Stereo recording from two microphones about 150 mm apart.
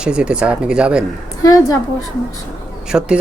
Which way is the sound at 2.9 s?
5° right (ahead or behind).